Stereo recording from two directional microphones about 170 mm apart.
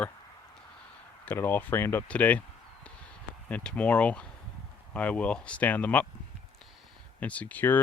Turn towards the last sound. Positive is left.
turn(degrees=10)  # may be behind; listen again after turning